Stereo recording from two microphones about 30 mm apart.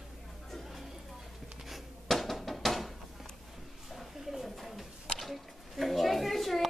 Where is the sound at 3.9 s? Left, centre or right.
Centre.